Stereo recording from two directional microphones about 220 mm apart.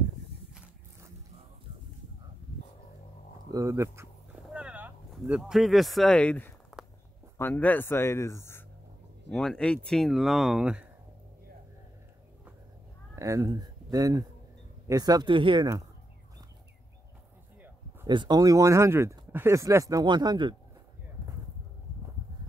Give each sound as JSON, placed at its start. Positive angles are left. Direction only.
{"t": 3.5, "sound": "a sound", "side_deg": -15}
{"t": 7.3, "sound": "speech", "side_deg": 10}
{"t": 13.1, "sound": "speech", "side_deg": -15}
{"t": 18.0, "sound": "speech", "side_deg": -20}